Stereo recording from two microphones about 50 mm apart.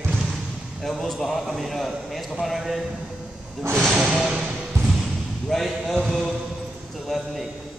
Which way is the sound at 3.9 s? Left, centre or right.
Centre.